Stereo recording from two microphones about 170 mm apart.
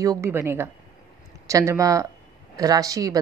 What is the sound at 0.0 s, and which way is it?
A woman's voice, 15° right (ahead or behind).